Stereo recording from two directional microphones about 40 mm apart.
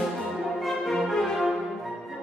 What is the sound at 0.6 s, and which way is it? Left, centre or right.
Music, centre.